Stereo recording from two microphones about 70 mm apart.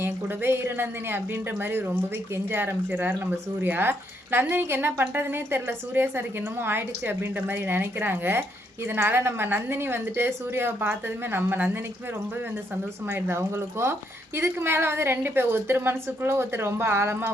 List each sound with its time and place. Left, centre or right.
0.0 s a woman's voice: right
13.1 s a woman's voice: right